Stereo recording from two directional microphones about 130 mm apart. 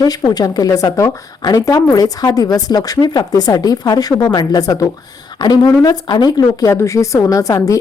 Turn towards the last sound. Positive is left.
turn(degrees=25)  # may be behind; listen again after turning